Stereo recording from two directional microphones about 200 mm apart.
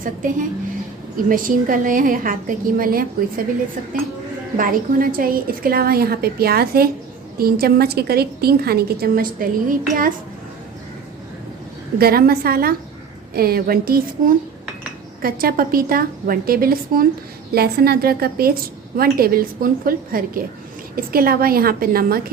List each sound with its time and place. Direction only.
0.0 s a woman's voice: 40° right (ahead or behind)
4.5 s a woman's voice: 45° right (ahead or behind)
11.9 s a woman's voice: 50° right (ahead or behind)